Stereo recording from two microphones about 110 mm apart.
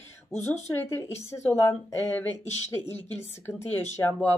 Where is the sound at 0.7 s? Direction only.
20° left (ahead or behind).